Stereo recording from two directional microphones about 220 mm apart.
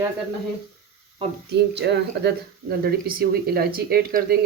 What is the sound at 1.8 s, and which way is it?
Speech, 50° right (ahead or behind).